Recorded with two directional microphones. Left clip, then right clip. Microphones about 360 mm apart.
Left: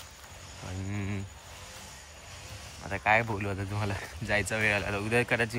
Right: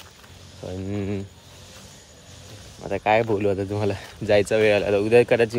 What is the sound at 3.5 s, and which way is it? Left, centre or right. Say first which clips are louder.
Speech: right 11 dB; right.